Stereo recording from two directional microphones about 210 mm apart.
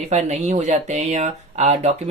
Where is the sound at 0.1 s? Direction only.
30° right (ahead or behind).